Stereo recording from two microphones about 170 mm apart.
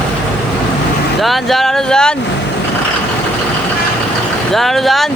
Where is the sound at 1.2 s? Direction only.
Centre (ahead or behind).